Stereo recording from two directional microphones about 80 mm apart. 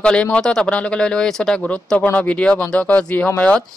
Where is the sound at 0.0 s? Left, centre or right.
Centre.